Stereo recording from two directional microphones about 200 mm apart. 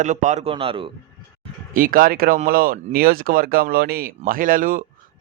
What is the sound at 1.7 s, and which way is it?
A man's voice, 45° right (ahead or behind).